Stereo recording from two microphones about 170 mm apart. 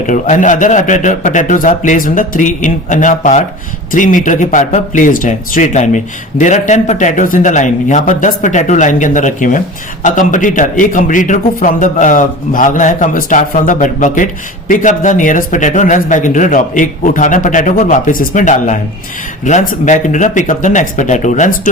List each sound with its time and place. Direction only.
0.1 s speech: 50° left (ahead or behind)